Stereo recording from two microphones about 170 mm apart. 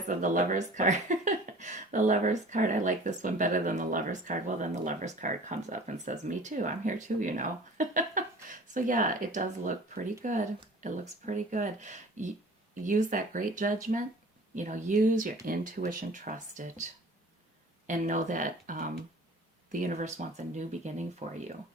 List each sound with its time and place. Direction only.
0.2 s speech: 45° right (ahead or behind)
17.8 s speech: 50° right (ahead or behind)